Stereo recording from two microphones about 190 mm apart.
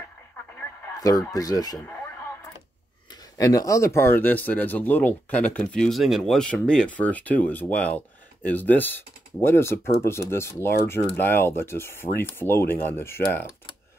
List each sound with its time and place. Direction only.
0.9 s speech: 20° left (ahead or behind)
3.3 s speech: 20° left (ahead or behind)